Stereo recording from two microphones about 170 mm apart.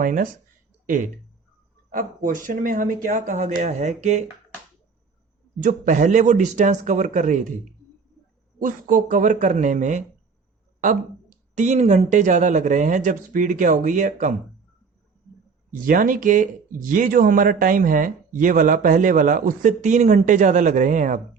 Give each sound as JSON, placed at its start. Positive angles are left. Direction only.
{"t": 0.0, "sound": "speech", "side_deg": -50}
{"t": 5.5, "sound": "speech", "side_deg": -50}
{"t": 8.5, "sound": "speech", "side_deg": -50}
{"t": 15.7, "sound": "speech", "side_deg": -50}